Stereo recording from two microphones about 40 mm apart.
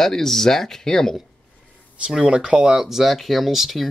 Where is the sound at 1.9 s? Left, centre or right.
Right; by 3.8 s centre.